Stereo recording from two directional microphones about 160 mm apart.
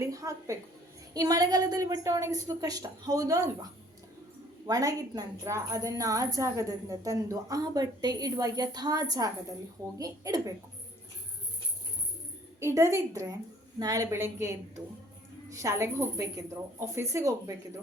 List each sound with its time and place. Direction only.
0.0 s a woman's voice: 20° right (ahead or behind)
12.5 s a woman's voice: 15° right (ahead or behind)